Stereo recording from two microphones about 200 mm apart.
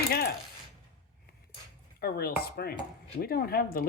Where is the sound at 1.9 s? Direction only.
50° left (ahead or behind).